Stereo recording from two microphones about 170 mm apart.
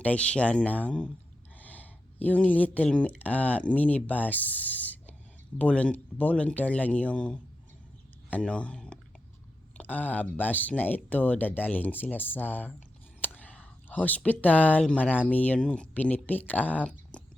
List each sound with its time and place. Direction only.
0.0 s speech: 5° left (ahead or behind)